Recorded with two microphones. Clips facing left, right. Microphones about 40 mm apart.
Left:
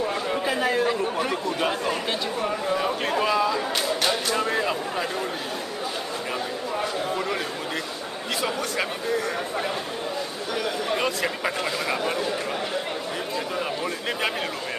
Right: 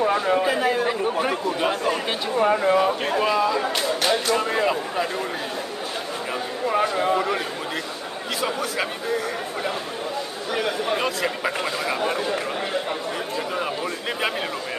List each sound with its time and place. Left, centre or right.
0.0 s a sound: right
0.4 s a sound: centre
0.8 s speech: centre
2.4 s speech: right
2.8 s speech: centre
6.8 s a man's voice: right
11.0 s speech: centre